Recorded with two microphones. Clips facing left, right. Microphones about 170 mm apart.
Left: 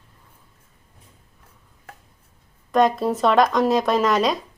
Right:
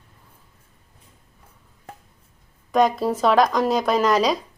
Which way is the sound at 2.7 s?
Centre (ahead or behind).